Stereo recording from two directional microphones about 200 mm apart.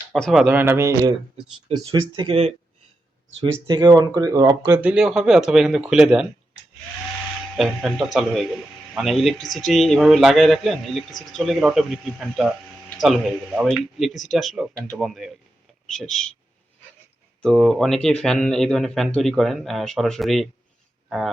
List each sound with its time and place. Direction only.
0.1 s speech: centre (ahead or behind); by 4.9 s 15° right (ahead or behind)
4.9 s speech: 5° right (ahead or behind)
7.5 s speech: centre (ahead or behind)
17.4 s speech: centre (ahead or behind)